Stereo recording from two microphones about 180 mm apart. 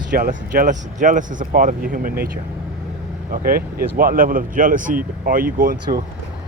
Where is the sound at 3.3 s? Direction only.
55° right (ahead or behind).